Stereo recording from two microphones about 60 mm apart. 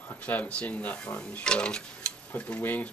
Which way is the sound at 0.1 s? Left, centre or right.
Left.